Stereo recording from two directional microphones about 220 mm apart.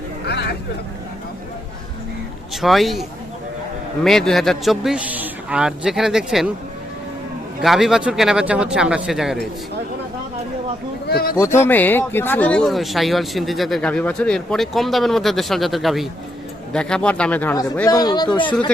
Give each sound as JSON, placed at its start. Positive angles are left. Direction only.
{"t": 0.3, "sound": "vehicle", "side_deg": 50}
{"t": 2.6, "sound": "speech", "side_deg": 0}
{"t": 7.6, "sound": "speech", "side_deg": 0}
{"t": 11.1, "sound": "speech", "side_deg": 45}
{"t": 11.3, "sound": "speech", "side_deg": 10}